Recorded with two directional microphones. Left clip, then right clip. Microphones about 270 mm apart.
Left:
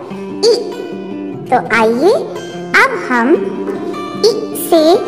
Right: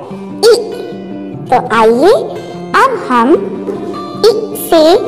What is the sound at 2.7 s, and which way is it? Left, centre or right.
Speech, centre.